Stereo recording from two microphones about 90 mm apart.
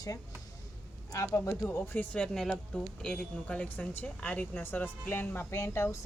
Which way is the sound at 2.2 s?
5° left (ahead or behind).